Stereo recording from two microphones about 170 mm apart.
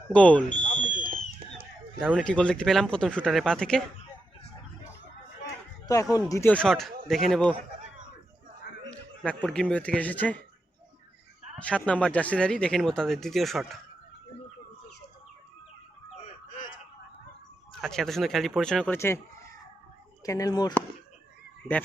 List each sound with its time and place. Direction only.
0.1 s speech: 10° left (ahead or behind)
0.6 s a sound: 50° left (ahead or behind)
2.0 s speech: centre (ahead or behind)
5.8 s a man's voice: 20° left (ahead or behind)
6.5 s speech: 5° left (ahead or behind)
8.9 s a man's voice: 5° left (ahead or behind)
11.6 s speech: 5° left (ahead or behind)
16.2 s a sound: 45° left (ahead or behind)
17.7 s speech: centre (ahead or behind)
20.2 s a man's voice: 20° left (ahead or behind)
21.7 s speech: 10° right (ahead or behind)